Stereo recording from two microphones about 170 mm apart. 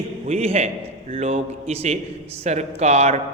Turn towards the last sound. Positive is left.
turn(degrees=-40)  # may be behind; listen again after turning